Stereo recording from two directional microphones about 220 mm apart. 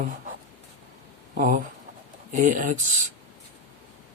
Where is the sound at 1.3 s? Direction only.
40° right (ahead or behind).